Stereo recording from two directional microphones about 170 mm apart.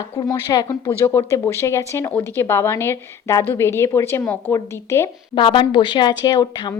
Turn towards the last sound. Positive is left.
turn(degrees=25)  # may be behind; listen again after turning